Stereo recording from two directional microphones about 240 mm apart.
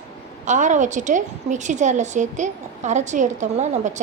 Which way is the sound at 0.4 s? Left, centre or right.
Right.